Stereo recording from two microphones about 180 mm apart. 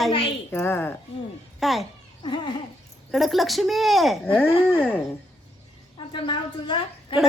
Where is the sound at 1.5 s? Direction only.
Centre (ahead or behind).